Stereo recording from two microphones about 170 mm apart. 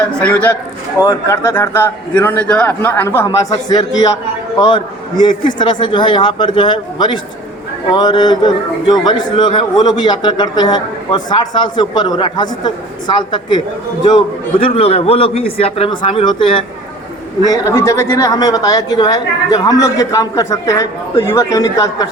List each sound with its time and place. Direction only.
0.2 s a man's voice: 10° left (ahead or behind); by 13.6 s 25° left (ahead or behind)
14.6 s a man's voice: 35° left (ahead or behind)
17.4 s a man's voice: 20° left (ahead or behind)